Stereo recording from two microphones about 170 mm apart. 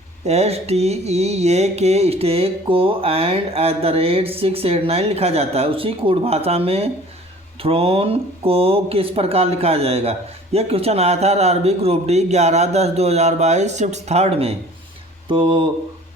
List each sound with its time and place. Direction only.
0.3 s speech: 40° right (ahead or behind)